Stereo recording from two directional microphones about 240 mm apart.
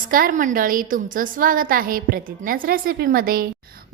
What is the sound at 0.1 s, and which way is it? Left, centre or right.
A woman's voice, right.